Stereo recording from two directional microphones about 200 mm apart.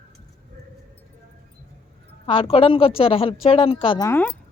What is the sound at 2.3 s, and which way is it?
A woman's voice, 25° left (ahead or behind).